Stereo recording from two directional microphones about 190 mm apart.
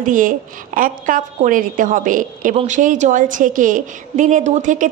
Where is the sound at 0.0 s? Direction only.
45° right (ahead or behind).